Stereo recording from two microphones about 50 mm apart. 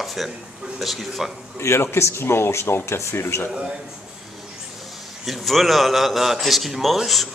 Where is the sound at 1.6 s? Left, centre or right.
Left.